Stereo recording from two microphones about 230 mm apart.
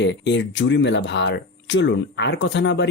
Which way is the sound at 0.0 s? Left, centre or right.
Left.